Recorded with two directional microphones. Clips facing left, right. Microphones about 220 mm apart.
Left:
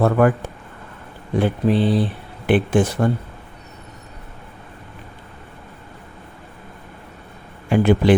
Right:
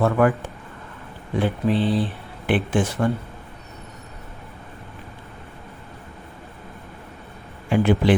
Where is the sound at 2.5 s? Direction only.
40° left (ahead or behind).